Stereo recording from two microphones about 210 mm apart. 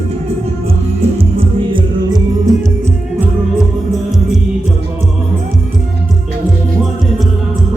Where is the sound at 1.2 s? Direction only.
25° right (ahead or behind).